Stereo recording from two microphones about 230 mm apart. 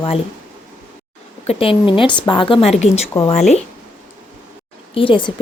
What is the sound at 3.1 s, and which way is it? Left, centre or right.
Speech, centre.